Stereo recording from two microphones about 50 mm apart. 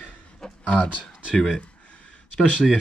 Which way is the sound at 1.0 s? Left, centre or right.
Centre.